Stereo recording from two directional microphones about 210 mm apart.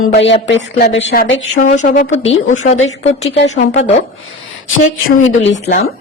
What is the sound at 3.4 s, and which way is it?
Speech, 60° left (ahead or behind).